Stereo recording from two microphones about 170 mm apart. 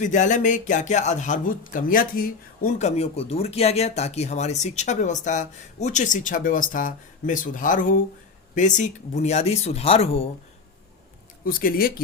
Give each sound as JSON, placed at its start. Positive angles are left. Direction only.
{"t": 0.0, "sound": "speech", "side_deg": 45}
{"t": 11.4, "sound": "speech", "side_deg": 55}